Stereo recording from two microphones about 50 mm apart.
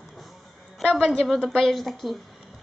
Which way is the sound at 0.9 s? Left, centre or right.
Centre.